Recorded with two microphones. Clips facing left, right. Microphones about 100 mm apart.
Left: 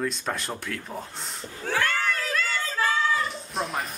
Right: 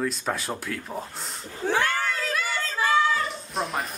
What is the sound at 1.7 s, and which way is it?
Crowd, 15° right (ahead or behind).